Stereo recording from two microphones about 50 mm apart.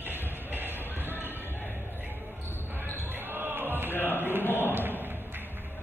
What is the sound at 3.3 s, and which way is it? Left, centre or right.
Music, right.